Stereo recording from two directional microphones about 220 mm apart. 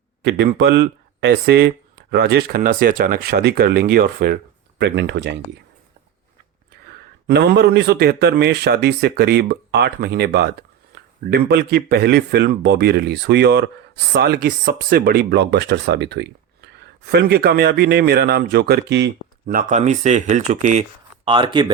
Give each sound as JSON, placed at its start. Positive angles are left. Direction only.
{"t": 0.2, "sound": "speech", "side_deg": -50}
{"t": 7.3, "sound": "speech", "side_deg": -45}
{"t": 21.2, "sound": "speech", "side_deg": -20}